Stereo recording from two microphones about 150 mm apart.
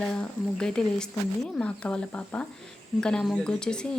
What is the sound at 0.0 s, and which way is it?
Speech, 5° left (ahead or behind).